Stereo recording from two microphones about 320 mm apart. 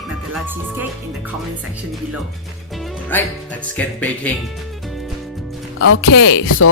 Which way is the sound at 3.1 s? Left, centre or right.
Centre.